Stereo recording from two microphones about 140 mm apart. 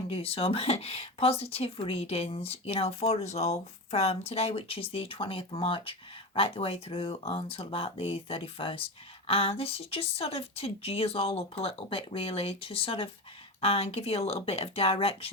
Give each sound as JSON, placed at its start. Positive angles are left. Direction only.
{"t": 0.1, "sound": "speech", "side_deg": 45}